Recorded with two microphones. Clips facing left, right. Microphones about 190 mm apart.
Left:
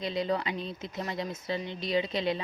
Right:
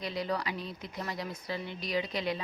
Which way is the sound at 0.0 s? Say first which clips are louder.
Left 4 dB; 25° left (ahead or behind).